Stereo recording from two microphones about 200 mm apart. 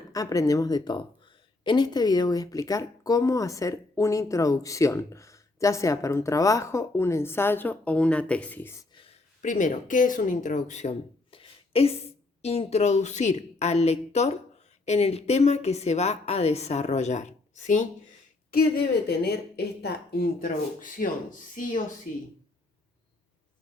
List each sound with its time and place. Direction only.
0.1 s speech: 15° left (ahead or behind)
9.4 s a woman's voice: 40° left (ahead or behind)
19.0 s speech: 55° left (ahead or behind)